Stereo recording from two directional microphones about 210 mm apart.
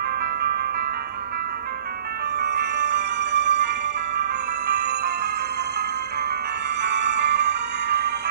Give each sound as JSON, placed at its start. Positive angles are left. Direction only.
{"t": 2.4, "sound": "music", "side_deg": -50}
{"t": 6.8, "sound": "music", "side_deg": -55}